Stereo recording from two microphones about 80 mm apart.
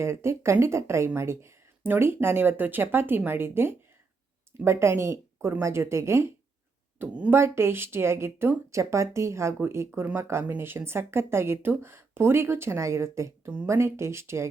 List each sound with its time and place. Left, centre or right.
0.0 s speech: right
7.0 s speech: centre
7.3 s speech: right